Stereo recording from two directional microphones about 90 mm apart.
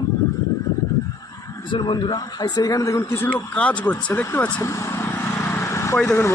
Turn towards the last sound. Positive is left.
turn(degrees=25)  # may be behind; listen again after turning